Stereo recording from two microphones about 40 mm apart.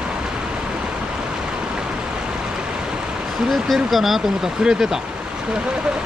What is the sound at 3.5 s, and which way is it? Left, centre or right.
Speech, centre.